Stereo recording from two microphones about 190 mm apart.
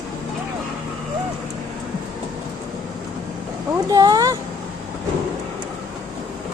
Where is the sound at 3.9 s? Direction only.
20° right (ahead or behind).